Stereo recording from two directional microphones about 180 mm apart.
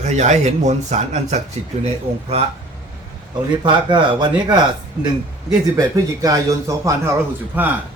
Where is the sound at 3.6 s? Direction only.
25° right (ahead or behind).